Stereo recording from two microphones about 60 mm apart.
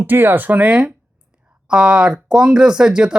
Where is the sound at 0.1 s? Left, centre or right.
Right.